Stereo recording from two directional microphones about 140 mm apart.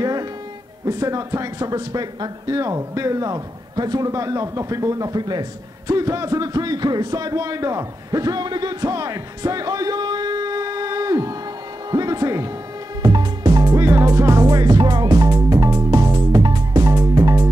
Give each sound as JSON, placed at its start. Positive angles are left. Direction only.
{"t": 0.0, "sound": "music", "side_deg": -25}
{"t": 0.8, "sound": "speech", "side_deg": -25}
{"t": 11.9, "sound": "music", "side_deg": -25}